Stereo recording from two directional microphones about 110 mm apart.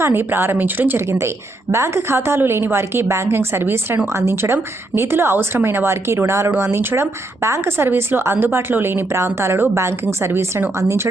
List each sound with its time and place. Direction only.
0.0 s speech: 20° right (ahead or behind)